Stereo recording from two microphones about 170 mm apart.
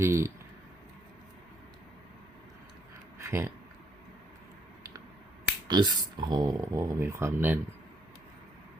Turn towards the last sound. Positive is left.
turn(degrees=-10)  # may be behind; listen again after turning